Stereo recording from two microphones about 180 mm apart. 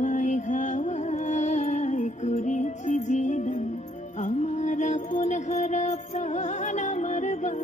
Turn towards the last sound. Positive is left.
turn(degrees=40)  # may be behind; listen again after turning